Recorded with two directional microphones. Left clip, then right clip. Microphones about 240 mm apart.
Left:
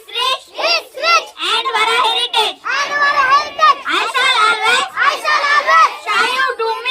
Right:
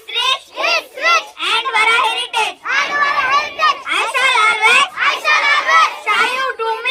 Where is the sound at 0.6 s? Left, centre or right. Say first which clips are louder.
Even; left.